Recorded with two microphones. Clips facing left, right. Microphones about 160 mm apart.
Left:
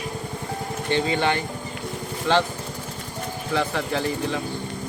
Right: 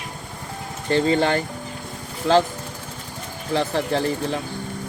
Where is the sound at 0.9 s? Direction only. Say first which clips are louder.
Right 4 dB; 35° right (ahead or behind).